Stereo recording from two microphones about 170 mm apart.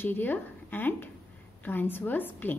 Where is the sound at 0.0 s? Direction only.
10° left (ahead or behind).